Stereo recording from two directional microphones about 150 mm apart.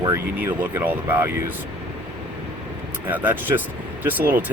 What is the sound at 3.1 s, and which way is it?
Speech, 10° right (ahead or behind).